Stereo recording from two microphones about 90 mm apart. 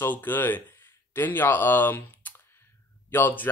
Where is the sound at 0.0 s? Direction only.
20° left (ahead or behind).